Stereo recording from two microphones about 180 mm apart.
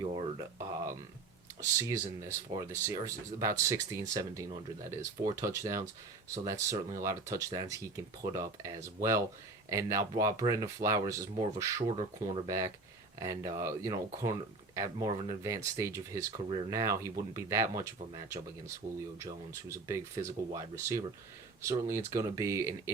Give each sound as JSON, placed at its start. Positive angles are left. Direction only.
{"t": 0.0, "sound": "a sound", "side_deg": -30}
{"t": 1.9, "sound": "speech", "side_deg": -15}
{"t": 11.8, "sound": "speech", "side_deg": -30}
{"t": 12.5, "sound": "speech", "side_deg": -20}
{"t": 19.2, "sound": "speech", "side_deg": -15}